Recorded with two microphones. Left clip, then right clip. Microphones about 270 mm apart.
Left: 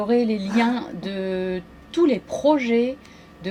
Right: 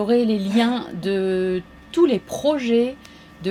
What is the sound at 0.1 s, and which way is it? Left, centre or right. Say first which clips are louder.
Speech: right 1 dB; right.